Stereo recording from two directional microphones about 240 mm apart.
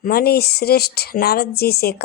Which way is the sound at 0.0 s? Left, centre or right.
Left.